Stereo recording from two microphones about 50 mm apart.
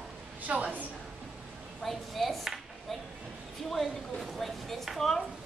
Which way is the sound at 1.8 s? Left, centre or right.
Centre.